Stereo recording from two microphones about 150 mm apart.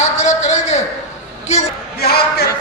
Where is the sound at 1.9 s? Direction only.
90° left.